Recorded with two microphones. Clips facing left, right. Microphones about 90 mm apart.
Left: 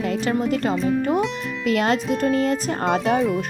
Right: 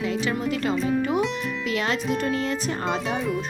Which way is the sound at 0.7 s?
Centre (ahead or behind).